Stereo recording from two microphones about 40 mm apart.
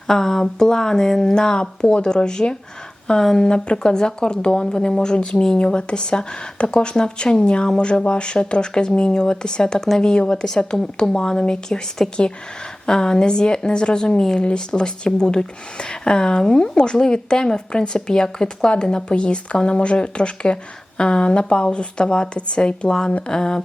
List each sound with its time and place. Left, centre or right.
0.1 s speech: centre
12.0 s speech: centre
12.8 s speech: centre
22.9 s speech: centre